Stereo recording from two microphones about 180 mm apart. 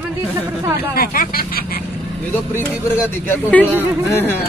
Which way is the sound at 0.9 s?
55° left (ahead or behind).